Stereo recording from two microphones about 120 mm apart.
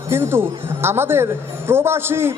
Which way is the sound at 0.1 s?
20° right (ahead or behind).